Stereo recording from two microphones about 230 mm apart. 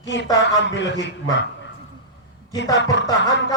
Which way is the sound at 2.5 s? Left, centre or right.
Left.